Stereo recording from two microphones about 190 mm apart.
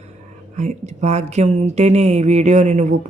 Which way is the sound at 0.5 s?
40° right (ahead or behind).